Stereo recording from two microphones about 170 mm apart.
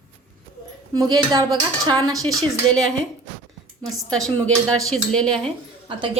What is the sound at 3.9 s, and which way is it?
Speech, 5° left (ahead or behind).